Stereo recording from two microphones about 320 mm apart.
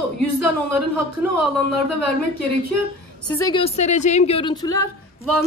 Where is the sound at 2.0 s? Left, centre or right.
Right.